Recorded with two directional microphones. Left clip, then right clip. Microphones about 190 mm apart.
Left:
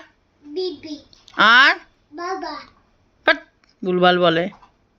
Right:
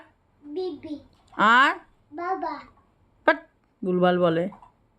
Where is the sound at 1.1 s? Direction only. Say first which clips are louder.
Left 6 dB; 5° right (ahead or behind).